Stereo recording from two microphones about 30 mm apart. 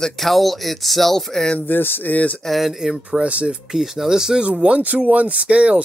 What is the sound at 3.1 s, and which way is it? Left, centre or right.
Speech, right.